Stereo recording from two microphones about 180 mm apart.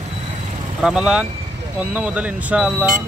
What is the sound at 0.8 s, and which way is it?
Speech, 5° right (ahead or behind).